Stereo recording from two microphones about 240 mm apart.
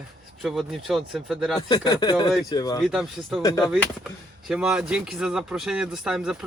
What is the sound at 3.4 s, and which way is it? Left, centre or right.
Speech, centre.